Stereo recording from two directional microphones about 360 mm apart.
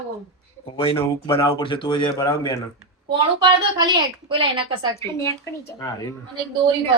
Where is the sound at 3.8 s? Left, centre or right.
Centre.